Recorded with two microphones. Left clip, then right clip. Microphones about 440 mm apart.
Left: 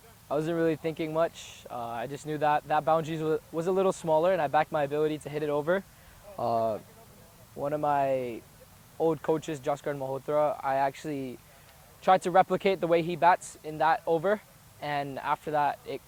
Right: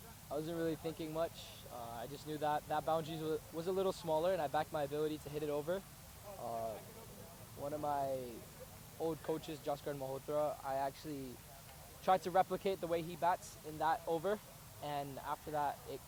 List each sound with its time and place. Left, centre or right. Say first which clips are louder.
0.3 s speech: left 12 dB; left
1.7 s speech: left 12 dB; left
6.4 s speech: left 15 dB; left